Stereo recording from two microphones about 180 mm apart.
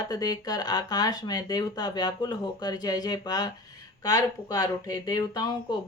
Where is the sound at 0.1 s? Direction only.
20° left (ahead or behind).